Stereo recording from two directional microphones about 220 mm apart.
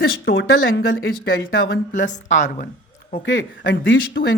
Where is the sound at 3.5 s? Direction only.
55° left (ahead or behind).